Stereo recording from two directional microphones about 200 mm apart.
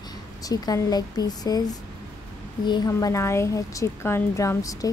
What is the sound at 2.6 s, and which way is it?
Speech, 20° left (ahead or behind).